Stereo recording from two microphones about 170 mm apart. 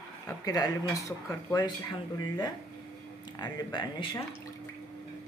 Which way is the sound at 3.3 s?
25° left (ahead or behind).